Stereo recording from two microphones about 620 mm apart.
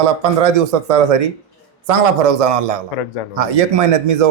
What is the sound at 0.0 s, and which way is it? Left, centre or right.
A man's voice, right.